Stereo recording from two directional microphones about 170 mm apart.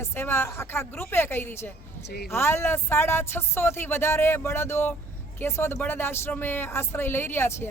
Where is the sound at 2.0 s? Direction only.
70° left (ahead or behind).